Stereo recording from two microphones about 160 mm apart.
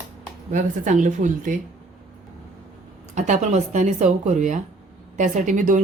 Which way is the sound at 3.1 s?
50° right (ahead or behind).